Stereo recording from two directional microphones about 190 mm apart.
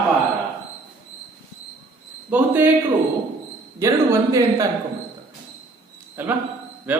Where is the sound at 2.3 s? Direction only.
10° right (ahead or behind).